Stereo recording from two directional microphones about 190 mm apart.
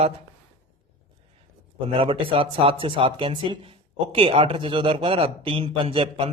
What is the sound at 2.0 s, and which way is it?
Speech, 30° right (ahead or behind).